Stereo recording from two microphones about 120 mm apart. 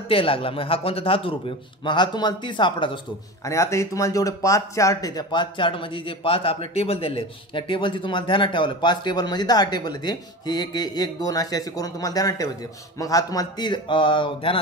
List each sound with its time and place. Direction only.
0.1 s speech: 50° left (ahead or behind)
1.9 s speech: 35° left (ahead or behind)
3.4 s speech: 25° left (ahead or behind); by 14.6 s 45° left (ahead or behind)